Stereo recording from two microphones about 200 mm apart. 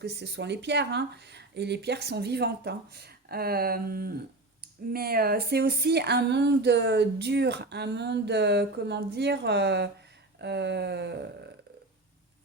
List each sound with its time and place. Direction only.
0.0 s speech: 60° right (ahead or behind)